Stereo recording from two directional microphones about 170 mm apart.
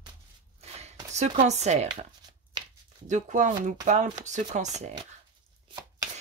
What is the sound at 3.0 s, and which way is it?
Speech, 45° right (ahead or behind).